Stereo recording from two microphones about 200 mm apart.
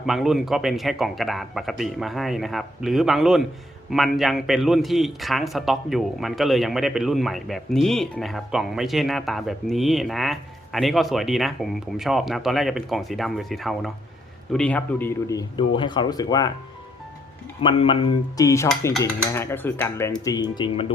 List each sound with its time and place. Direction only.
0.0 s a man's voice: centre (ahead or behind); by 16.5 s 20° left (ahead or behind)
17.6 s speech: 25° left (ahead or behind)